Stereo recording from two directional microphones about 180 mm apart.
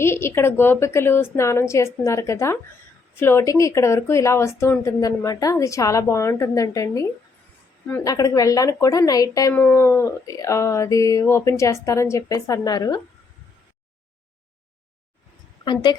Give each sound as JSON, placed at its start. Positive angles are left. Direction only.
{"t": 0.0, "sound": "a woman's voice", "side_deg": 15}
{"t": 15.6, "sound": "a woman's voice", "side_deg": 25}